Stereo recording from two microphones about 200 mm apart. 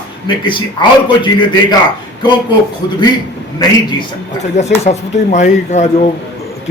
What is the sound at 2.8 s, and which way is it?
Speech, 20° left (ahead or behind).